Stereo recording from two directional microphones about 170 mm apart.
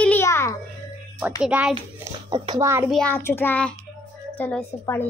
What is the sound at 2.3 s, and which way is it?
Speech, 25° right (ahead or behind).